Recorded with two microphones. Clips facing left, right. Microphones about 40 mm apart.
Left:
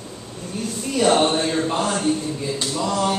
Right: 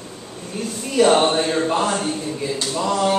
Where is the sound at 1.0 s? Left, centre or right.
Centre.